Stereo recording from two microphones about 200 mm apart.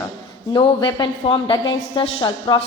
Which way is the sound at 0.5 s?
25° left (ahead or behind).